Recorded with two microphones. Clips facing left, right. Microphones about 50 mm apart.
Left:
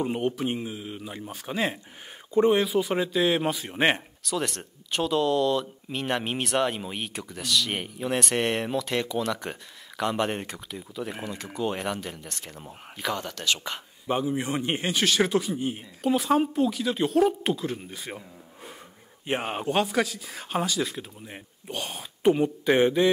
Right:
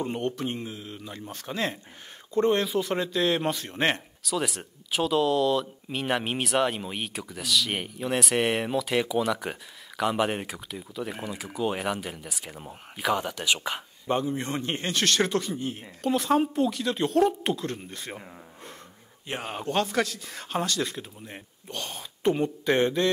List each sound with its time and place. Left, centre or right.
0.0 s a man's voice: centre
4.2 s speech: centre
14.0 s a man's voice: centre
19.2 s speech: left
19.6 s a man's voice: centre